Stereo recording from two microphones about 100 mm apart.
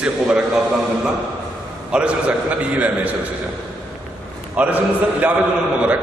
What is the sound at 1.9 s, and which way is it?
A man's voice, 10° right (ahead or behind).